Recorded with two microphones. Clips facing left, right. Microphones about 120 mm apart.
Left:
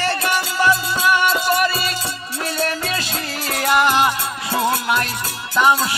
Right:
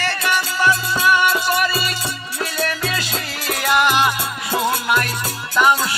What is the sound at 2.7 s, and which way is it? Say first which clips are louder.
Music: even; 25° left (ahead or behind).